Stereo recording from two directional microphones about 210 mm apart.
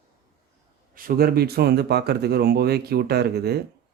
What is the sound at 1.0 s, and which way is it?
Speech, 45° right (ahead or behind).